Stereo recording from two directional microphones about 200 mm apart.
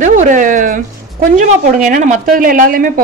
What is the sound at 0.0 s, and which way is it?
A woman's voice, 40° right (ahead or behind).